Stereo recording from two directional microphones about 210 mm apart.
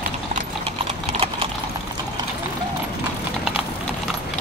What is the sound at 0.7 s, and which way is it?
Typing, 25° right (ahead or behind).